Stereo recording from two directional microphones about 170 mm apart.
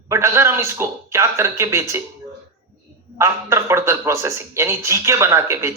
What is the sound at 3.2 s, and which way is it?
A man's voice, 15° right (ahead or behind).